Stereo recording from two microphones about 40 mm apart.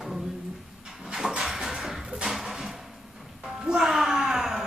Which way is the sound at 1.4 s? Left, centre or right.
Centre.